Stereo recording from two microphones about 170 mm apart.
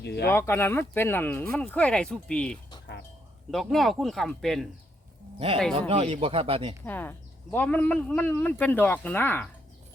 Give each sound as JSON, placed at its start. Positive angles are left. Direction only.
{"t": 0.0, "sound": "speech", "side_deg": 75}
{"t": 0.3, "sound": "speech", "side_deg": 15}
{"t": 5.9, "sound": "speech", "side_deg": -35}
{"t": 6.8, "sound": "speech", "side_deg": 10}